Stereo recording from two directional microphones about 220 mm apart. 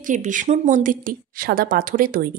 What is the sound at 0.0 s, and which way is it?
Speech, 35° right (ahead or behind).